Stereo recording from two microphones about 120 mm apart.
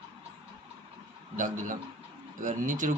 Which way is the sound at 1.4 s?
90° right.